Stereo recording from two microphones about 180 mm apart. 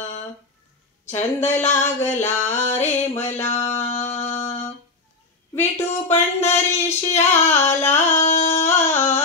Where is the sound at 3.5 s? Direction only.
15° left (ahead or behind).